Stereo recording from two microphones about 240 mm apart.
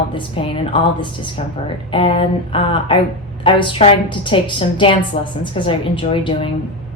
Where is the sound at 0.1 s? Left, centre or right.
Left.